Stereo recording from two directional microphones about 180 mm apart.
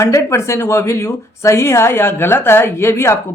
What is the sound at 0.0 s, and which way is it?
A woman's voice, 15° left (ahead or behind).